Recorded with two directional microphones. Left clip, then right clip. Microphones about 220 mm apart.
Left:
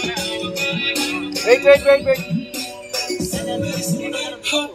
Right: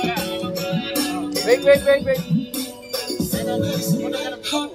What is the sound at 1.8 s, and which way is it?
Music, 25° left (ahead or behind).